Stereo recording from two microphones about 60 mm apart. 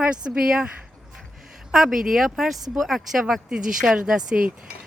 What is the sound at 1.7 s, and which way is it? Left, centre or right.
Speech, centre.